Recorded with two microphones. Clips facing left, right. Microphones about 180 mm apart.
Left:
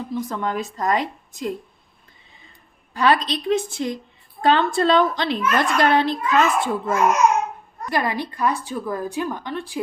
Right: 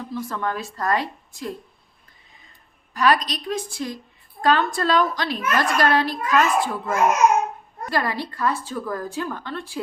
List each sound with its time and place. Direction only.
0.0 s speech: 20° left (ahead or behind)
2.9 s a woman's voice: 25° left (ahead or behind)